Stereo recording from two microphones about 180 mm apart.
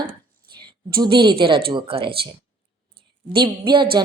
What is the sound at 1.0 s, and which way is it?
Speech, 25° right (ahead or behind).